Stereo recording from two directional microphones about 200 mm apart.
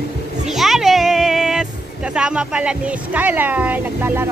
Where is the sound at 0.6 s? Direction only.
Centre (ahead or behind).